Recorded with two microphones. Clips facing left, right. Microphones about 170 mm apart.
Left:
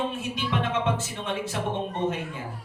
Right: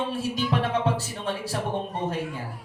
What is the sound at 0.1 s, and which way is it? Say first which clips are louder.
A man's voice: right 3 dB; 35° right (ahead or behind).